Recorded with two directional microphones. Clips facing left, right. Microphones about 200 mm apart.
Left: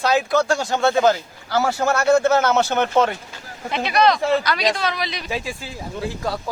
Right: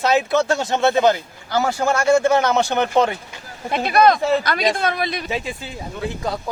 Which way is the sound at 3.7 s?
50° right (ahead or behind).